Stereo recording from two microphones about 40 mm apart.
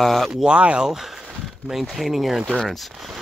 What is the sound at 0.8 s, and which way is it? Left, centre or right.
Speech, centre.